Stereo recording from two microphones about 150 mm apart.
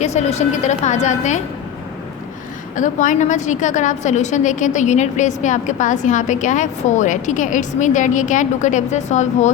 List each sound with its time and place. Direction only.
0.0 s a woman's voice: 45° left (ahead or behind)
2.7 s a woman's voice: 60° left (ahead or behind)